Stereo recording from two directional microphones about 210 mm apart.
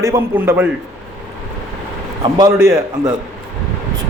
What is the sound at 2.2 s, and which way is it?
Speech, 20° right (ahead or behind).